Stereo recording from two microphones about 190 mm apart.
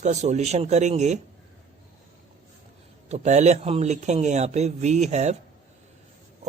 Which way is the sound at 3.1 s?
35° right (ahead or behind).